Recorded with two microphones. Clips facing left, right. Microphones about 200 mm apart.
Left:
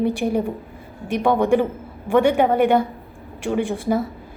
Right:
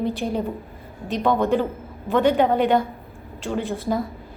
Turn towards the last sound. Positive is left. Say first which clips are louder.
# left 4 dB
turn(degrees=15)  # may be behind; listen again after turning